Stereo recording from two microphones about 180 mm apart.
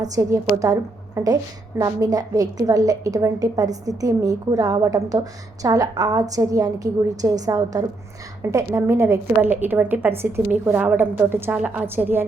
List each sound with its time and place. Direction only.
0.0 s a woman's voice: 20° right (ahead or behind)